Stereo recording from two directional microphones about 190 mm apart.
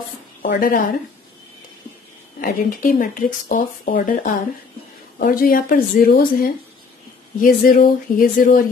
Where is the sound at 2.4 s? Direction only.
45° left (ahead or behind).